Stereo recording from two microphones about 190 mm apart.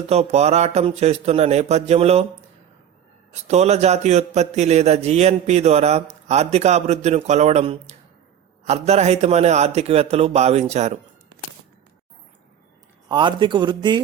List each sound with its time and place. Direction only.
0.1 s a man's voice: 35° right (ahead or behind)
3.4 s a man's voice: 35° right (ahead or behind)
13.1 s a man's voice: 25° right (ahead or behind)